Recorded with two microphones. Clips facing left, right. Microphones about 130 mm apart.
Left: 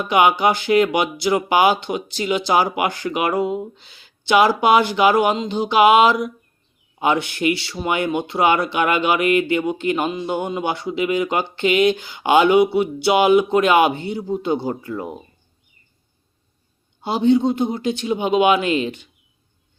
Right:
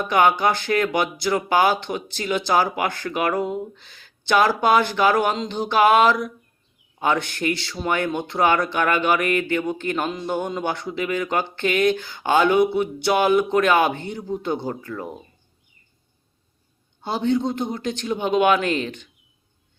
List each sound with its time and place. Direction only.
0.1 s speech: 15° left (ahead or behind)
17.0 s speech: 15° left (ahead or behind)